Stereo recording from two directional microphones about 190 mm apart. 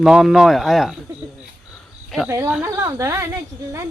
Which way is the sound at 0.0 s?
Centre (ahead or behind).